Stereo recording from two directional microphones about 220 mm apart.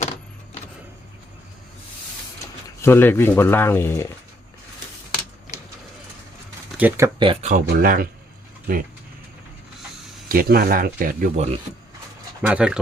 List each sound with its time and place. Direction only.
2.6 s speech: 10° left (ahead or behind)
6.7 s speech: 10° right (ahead or behind)
7.3 s speech: 35° right (ahead or behind)
10.2 s speech: 40° right (ahead or behind)
12.4 s speech: 5° right (ahead or behind)